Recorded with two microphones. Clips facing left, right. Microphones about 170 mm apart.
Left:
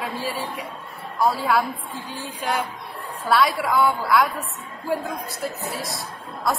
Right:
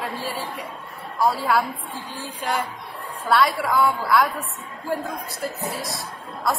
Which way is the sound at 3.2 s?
Centre (ahead or behind).